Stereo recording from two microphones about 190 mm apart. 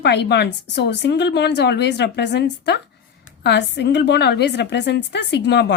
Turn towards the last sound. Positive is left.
turn(degrees=65)  # may be behind; listen again after turning